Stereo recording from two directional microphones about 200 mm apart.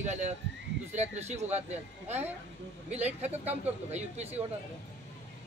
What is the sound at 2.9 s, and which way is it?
Speech, 35° right (ahead or behind).